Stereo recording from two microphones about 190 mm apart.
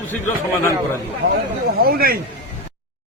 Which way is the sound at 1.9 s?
55° right (ahead or behind).